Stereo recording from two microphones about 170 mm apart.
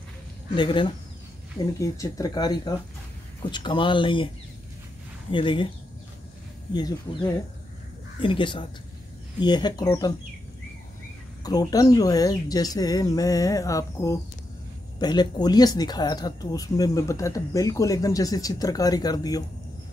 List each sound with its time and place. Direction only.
0.6 s speech: 30° left (ahead or behind)
5.3 s speech: 30° left (ahead or behind)
8.2 s speech: 30° left (ahead or behind)
11.4 s speech: 20° left (ahead or behind)